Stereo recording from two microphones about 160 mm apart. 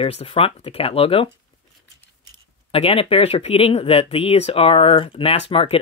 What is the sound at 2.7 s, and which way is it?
Speech, 35° left (ahead or behind).